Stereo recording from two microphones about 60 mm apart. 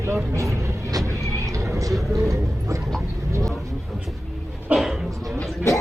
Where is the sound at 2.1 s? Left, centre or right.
Right.